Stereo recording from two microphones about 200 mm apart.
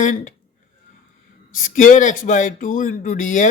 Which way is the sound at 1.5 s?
40° left (ahead or behind).